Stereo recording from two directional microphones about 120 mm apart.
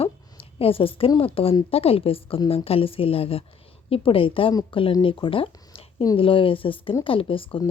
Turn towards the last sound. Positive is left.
turn(degrees=45)  # may be behind; listen again after turning